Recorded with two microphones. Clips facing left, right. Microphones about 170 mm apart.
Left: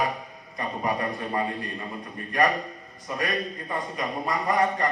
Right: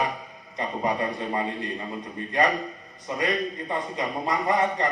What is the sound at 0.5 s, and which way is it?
A man's voice, 25° right (ahead or behind).